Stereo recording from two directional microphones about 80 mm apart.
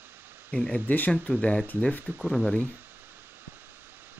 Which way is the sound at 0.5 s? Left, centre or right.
Centre.